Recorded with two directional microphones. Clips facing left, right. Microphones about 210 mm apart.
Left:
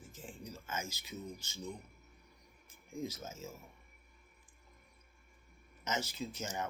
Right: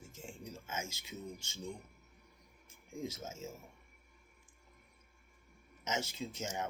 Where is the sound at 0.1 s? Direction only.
25° right (ahead or behind).